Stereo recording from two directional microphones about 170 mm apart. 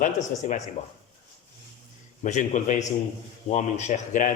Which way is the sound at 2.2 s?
45° left (ahead or behind).